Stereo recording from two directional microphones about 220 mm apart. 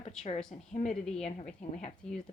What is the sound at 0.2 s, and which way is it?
Speech, 5° left (ahead or behind).